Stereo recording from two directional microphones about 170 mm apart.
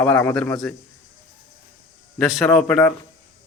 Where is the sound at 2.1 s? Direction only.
Centre (ahead or behind).